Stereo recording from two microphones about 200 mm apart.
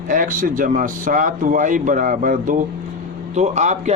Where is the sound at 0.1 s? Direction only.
40° right (ahead or behind).